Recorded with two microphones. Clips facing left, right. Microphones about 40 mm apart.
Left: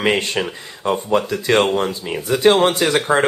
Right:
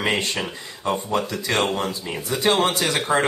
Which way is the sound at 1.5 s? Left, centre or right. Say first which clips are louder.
Left 7 dB; left.